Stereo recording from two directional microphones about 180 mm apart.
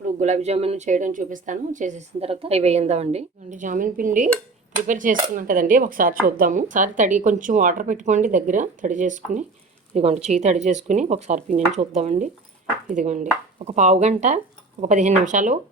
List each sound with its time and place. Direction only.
0.0 s a woman's voice: 40° right (ahead or behind)